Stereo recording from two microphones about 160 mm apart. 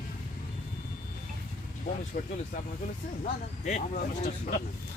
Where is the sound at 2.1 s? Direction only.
65° left (ahead or behind).